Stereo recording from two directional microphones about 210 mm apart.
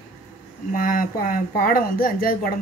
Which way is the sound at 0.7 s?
40° left (ahead or behind).